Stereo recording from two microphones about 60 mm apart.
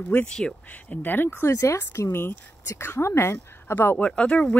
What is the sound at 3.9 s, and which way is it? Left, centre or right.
Speech, centre.